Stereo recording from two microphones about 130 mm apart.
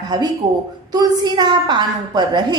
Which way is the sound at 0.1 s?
30° right (ahead or behind).